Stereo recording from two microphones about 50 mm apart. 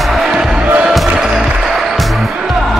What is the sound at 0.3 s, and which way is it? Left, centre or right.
Music, centre.